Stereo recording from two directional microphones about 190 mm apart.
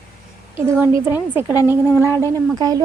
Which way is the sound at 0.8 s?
10° right (ahead or behind).